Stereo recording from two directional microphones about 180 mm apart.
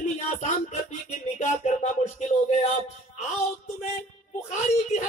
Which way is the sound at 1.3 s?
40° left (ahead or behind).